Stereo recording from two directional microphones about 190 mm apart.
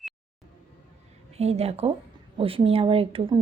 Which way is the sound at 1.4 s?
35° right (ahead or behind).